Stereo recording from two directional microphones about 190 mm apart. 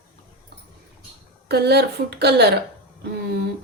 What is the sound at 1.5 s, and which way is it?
A woman's voice, 60° right (ahead or behind).